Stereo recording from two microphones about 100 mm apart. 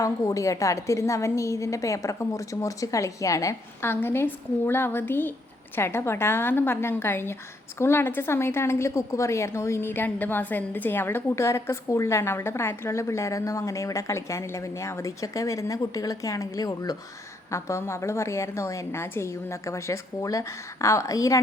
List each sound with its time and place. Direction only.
0.0 s a woman's voice: 35° left (ahead or behind)
17.5 s a woman's voice: 30° left (ahead or behind)